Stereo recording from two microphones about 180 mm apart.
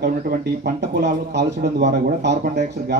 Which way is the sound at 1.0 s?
70° right (ahead or behind).